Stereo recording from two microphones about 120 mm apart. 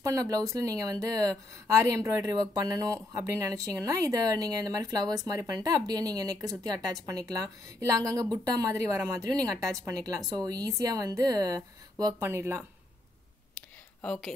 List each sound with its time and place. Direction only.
0.0 s a woman's voice: 30° right (ahead or behind)
13.6 s a sound: 5° left (ahead or behind)
14.0 s speech: 5° left (ahead or behind)